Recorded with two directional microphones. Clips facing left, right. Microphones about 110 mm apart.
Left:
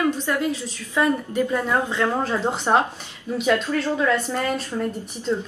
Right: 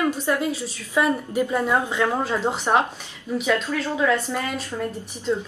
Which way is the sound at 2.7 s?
10° left (ahead or behind).